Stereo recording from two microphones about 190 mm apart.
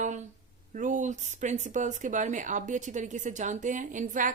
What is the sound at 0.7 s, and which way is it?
A woman's voice, 40° right (ahead or behind).